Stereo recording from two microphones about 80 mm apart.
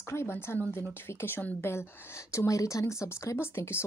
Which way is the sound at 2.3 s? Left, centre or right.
Left.